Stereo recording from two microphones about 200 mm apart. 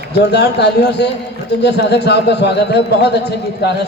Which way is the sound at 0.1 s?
55° left (ahead or behind).